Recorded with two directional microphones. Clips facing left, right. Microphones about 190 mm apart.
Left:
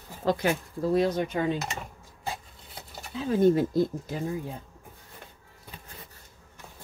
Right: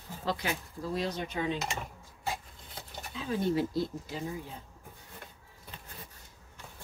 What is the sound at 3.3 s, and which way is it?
Speech, 50° left (ahead or behind).